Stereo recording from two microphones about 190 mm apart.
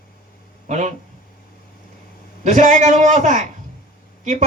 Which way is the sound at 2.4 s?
40° right (ahead or behind).